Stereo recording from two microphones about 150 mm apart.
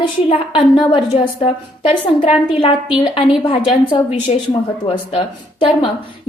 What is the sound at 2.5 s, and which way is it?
Speech, 35° left (ahead or behind).